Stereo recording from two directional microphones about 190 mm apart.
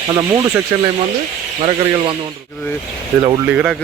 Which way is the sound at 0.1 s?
20° right (ahead or behind).